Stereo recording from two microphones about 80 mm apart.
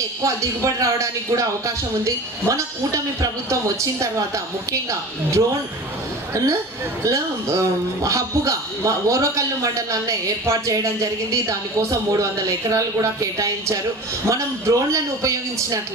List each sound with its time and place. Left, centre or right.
0.2 s a man's voice: right
6.3 s a man's voice: right